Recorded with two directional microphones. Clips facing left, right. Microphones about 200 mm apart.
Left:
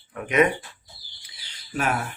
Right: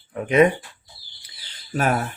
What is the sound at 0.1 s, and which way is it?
Speech, 30° right (ahead or behind).